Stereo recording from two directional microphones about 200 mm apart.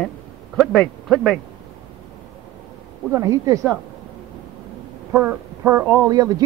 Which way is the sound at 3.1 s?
15° right (ahead or behind).